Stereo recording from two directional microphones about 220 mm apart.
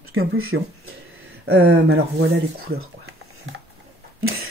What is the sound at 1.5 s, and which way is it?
Speech, 50° right (ahead or behind).